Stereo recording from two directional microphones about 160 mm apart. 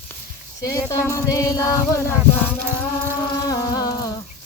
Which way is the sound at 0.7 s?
20° left (ahead or behind).